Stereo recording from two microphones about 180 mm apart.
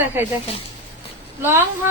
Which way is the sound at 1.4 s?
15° right (ahead or behind).